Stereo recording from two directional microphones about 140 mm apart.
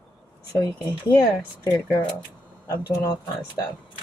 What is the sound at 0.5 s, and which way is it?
Speech, 20° left (ahead or behind).